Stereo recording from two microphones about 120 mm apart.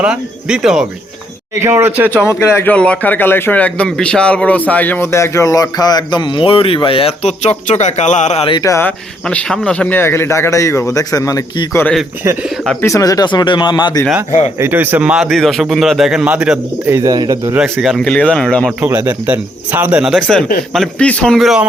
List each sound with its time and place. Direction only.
0.0 s speech: 10° right (ahead or behind)
1.6 s speech: 20° right (ahead or behind)
2.0 s a man's voice: 20° left (ahead or behind)
2.7 s a man's voice: 10° left (ahead or behind); by 8.4 s 70° left (ahead or behind)
9.3 s a man's voice: 5° left (ahead or behind); by 11.8 s 30° left (ahead or behind)
12.8 s speech: 25° left (ahead or behind)
14.6 s speech: 15° right (ahead or behind)
16.9 s speech: 30° right (ahead or behind)
17.7 s speech: centre (ahead or behind)
18.9 s speech: 15° right (ahead or behind)
20.1 s speech: 5° left (ahead or behind)
21.3 s speech: centre (ahead or behind)